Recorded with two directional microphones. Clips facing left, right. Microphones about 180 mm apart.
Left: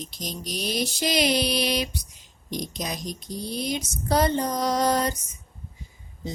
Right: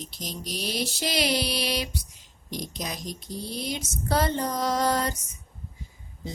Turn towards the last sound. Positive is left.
turn(degrees=20)  # may be behind; listen again after turning